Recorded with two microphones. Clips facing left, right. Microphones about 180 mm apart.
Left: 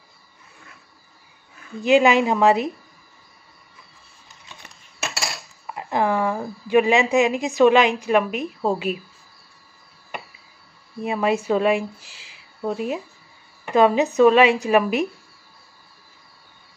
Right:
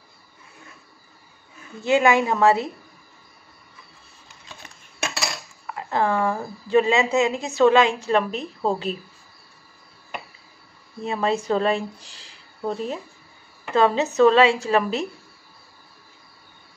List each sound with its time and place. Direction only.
1.8 s a woman's voice: 15° left (ahead or behind)
5.8 s speech: 15° left (ahead or behind)
11.0 s a woman's voice: 10° left (ahead or behind)